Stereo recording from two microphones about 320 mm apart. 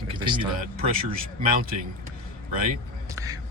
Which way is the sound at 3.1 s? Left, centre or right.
Centre.